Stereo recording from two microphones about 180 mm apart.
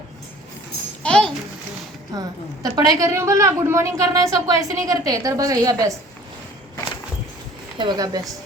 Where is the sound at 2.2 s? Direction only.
20° right (ahead or behind).